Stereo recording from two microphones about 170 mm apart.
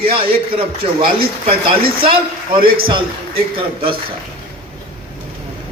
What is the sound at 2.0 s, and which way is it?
Speech, 30° right (ahead or behind).